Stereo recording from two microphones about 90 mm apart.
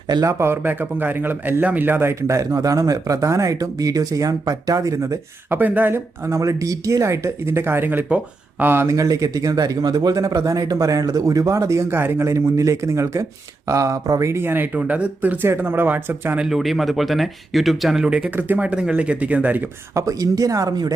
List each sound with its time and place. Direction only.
0.3 s speech: 30° right (ahead or behind)
5.5 s speech: 20° right (ahead or behind)
8.9 s speech: 40° right (ahead or behind); by 16.4 s 20° right (ahead or behind)
16.4 s speech: centre (ahead or behind)
19.9 s speech: 35° right (ahead or behind)